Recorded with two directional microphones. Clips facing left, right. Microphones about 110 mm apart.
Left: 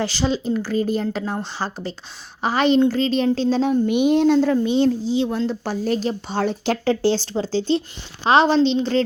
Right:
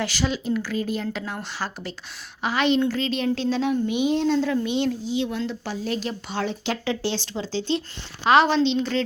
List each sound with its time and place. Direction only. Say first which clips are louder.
0.0 s speech: left 4 dB; 30° left (ahead or behind)
3.8 s a woman's voice: left 6 dB; 55° left (ahead or behind)
4.4 s speech: left 6 dB; 35° left (ahead or behind)